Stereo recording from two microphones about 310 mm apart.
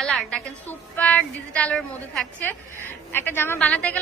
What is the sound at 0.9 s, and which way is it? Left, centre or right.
A woman's voice, centre.